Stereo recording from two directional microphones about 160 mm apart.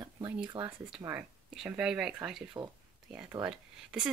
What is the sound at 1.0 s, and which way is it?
Speech, 5° right (ahead or behind).